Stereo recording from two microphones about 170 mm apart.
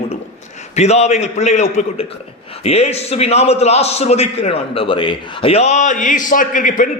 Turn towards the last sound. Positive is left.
turn(degrees=50)  # may be behind; listen again after turning